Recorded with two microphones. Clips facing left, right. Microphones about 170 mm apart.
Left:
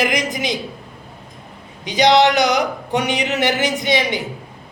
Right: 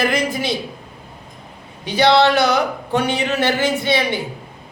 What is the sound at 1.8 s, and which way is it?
A man's voice, 15° left (ahead or behind).